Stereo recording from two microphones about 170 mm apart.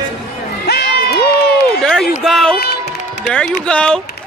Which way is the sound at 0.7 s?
70° left (ahead or behind).